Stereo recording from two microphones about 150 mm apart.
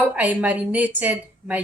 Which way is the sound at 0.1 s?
10° right (ahead or behind).